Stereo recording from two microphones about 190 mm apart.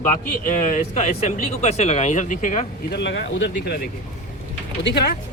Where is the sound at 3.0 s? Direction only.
70° left (ahead or behind).